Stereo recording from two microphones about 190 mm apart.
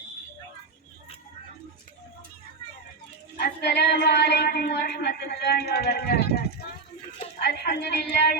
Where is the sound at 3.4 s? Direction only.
60° left (ahead or behind).